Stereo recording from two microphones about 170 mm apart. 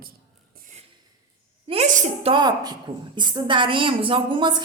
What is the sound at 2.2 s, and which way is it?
A woman's voice, 25° right (ahead or behind).